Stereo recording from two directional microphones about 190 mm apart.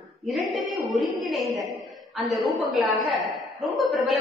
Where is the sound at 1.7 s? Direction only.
Centre (ahead or behind).